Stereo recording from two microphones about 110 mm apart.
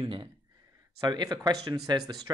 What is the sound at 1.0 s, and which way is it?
Speech, 40° right (ahead or behind).